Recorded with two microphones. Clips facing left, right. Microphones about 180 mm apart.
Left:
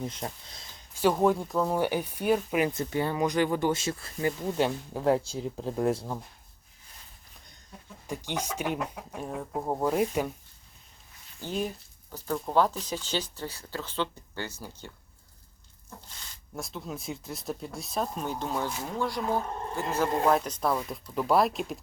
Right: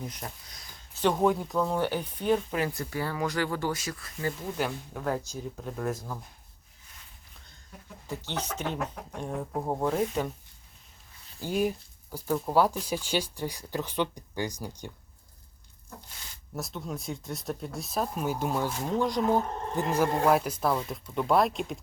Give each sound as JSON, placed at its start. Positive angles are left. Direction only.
{"t": 0.0, "sound": "speech", "side_deg": 25}
{"t": 0.9, "sound": "speech", "side_deg": 5}
{"t": 8.0, "sound": "speech", "side_deg": 15}
{"t": 11.4, "sound": "speech", "side_deg": -10}
{"t": 16.6, "sound": "speech", "side_deg": 0}